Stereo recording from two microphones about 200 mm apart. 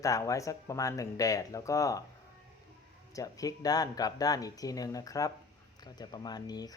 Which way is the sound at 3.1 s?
15° left (ahead or behind).